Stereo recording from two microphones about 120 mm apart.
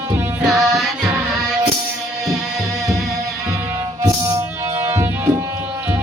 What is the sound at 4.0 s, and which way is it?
Music, 20° right (ahead or behind).